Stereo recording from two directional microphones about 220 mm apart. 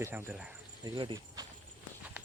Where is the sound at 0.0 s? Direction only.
10° right (ahead or behind).